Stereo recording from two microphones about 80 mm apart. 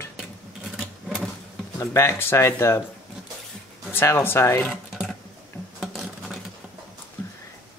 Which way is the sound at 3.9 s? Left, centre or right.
Left.